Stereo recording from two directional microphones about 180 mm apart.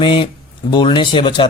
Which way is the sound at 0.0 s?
30° left (ahead or behind).